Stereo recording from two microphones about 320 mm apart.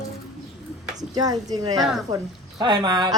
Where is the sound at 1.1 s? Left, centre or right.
Centre.